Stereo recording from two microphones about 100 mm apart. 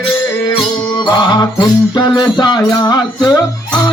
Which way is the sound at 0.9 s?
45° left (ahead or behind).